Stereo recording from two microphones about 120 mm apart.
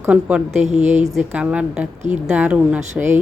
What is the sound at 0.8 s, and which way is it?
Speech, 75° right (ahead or behind).